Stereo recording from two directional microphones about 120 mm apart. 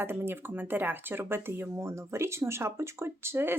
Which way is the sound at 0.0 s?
20° right (ahead or behind).